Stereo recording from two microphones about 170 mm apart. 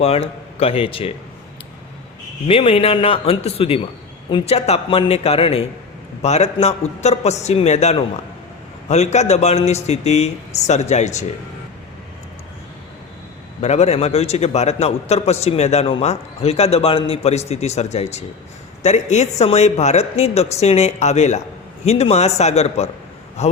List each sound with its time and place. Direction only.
0.0 s a man's voice: 35° left (ahead or behind)
2.5 s a man's voice: 35° left (ahead or behind)
13.6 s a man's voice: 40° left (ahead or behind)